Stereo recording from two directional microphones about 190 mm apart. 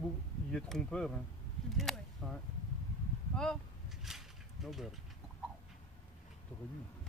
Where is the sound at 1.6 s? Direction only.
Centre (ahead or behind).